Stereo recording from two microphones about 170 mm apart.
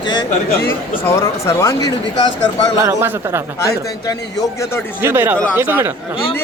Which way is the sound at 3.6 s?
20° left (ahead or behind).